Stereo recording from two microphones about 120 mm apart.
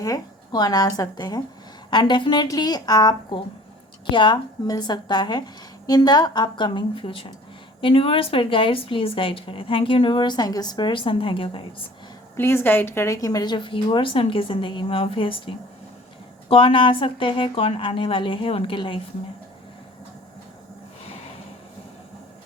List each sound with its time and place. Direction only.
0.0 s a woman's voice: 30° left (ahead or behind); by 11.6 s 50° left (ahead or behind)
12.4 s a woman's voice: 20° left (ahead or behind)
13.1 s a woman's voice: 30° left (ahead or behind)